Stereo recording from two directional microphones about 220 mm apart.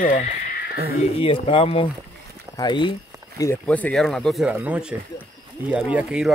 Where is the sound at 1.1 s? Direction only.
25° left (ahead or behind).